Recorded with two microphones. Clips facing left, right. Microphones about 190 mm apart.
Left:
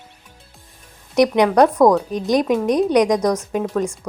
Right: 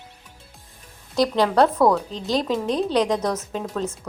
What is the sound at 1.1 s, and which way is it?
A woman's voice, 20° left (ahead or behind).